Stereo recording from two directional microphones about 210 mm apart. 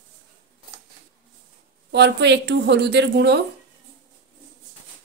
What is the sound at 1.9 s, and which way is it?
A woman's voice, 55° right (ahead or behind).